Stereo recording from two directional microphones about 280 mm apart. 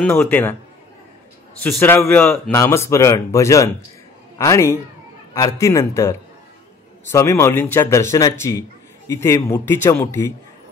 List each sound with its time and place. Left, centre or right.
0.0 s a man's voice: centre
1.6 s a man's voice: centre